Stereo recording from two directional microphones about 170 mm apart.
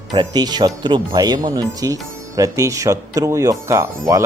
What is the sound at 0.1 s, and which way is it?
Speech, 25° right (ahead or behind).